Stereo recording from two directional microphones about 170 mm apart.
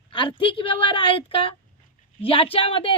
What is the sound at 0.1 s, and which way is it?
A woman's voice, 30° left (ahead or behind).